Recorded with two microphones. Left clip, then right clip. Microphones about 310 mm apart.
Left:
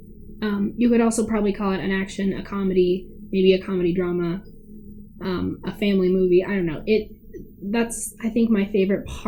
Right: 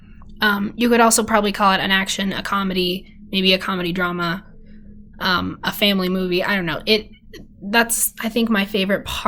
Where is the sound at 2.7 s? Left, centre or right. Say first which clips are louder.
Left 2 dB; right.